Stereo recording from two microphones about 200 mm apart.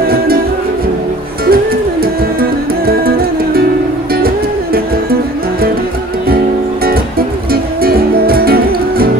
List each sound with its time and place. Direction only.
1.4 s music: 50° right (ahead or behind)
6.2 s music: 50° right (ahead or behind)